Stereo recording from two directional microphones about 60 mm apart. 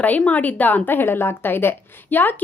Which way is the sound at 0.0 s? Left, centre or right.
Left.